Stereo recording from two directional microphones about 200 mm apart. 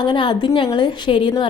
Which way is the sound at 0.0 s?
25° left (ahead or behind).